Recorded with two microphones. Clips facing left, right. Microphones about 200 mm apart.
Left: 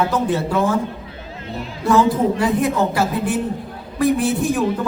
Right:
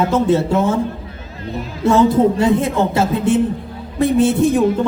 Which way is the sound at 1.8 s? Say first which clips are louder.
Right 4 dB; 25° right (ahead or behind).